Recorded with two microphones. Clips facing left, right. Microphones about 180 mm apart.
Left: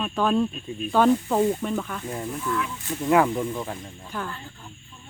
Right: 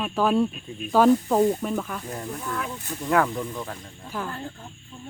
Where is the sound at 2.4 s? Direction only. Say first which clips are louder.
Left 3 dB; 40° right (ahead or behind).